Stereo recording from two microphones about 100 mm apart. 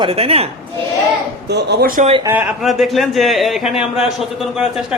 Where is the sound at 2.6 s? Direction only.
Centre (ahead or behind).